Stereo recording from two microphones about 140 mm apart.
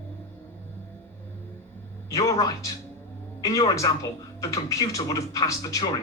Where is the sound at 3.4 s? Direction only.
25° left (ahead or behind).